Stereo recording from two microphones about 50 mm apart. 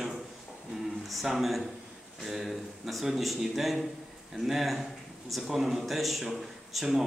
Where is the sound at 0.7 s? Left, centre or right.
Centre.